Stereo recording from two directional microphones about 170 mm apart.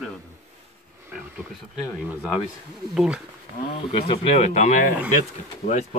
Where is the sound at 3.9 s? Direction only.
40° left (ahead or behind).